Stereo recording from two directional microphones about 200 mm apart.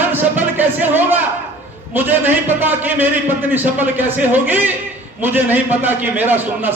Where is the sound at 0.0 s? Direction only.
10° right (ahead or behind).